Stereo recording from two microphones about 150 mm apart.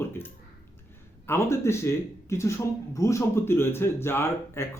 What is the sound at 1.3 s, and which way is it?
Speech, 15° left (ahead or behind).